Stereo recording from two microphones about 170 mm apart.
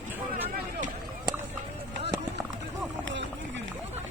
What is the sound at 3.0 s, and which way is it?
Run, 90° right.